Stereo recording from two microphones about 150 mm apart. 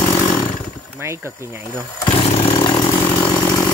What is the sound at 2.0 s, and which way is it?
Chainsaw, 35° left (ahead or behind).